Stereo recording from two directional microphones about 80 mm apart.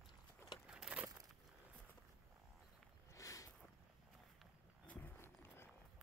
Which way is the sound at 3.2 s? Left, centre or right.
Left.